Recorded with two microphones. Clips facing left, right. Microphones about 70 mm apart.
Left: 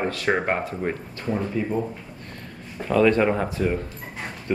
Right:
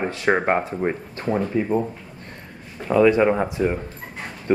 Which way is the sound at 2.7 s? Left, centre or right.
Centre.